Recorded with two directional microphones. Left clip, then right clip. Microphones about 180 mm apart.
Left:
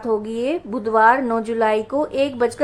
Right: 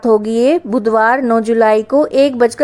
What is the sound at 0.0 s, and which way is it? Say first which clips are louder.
Speech: right 10 dB; 40° right (ahead or behind).